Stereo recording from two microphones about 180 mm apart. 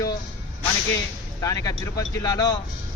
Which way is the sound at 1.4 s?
20° left (ahead or behind).